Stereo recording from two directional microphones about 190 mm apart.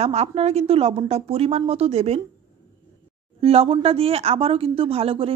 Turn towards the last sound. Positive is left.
turn(degrees=-30)  # may be behind; listen again after turning